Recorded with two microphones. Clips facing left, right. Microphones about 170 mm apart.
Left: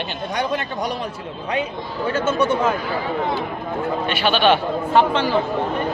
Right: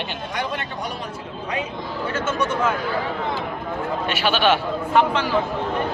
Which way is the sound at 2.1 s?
30° left (ahead or behind).